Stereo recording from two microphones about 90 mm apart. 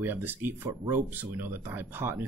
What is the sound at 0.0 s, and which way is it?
Speech, 20° right (ahead or behind).